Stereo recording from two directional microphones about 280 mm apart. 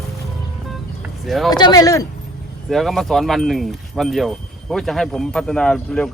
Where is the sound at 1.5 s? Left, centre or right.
Centre.